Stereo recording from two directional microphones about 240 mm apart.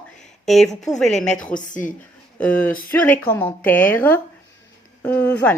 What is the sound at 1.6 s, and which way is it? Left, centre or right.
Speech, left.